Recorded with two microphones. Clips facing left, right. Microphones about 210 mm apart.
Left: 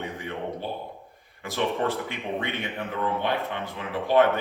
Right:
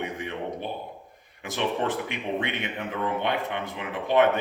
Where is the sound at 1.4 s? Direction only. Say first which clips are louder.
Left 1 dB; 20° right (ahead or behind).